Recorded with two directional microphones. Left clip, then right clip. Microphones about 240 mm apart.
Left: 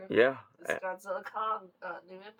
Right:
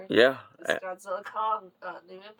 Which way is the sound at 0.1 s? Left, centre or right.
Right.